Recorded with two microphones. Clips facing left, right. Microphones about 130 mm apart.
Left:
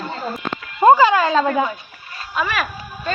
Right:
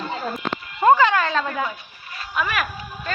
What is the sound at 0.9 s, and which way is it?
Speech, 10° left (ahead or behind).